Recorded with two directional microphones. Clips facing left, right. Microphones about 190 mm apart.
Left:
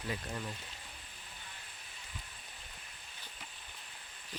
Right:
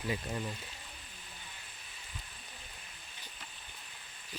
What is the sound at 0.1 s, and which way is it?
Speech, 10° right (ahead or behind).